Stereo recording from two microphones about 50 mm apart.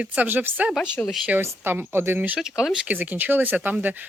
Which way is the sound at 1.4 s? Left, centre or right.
Right.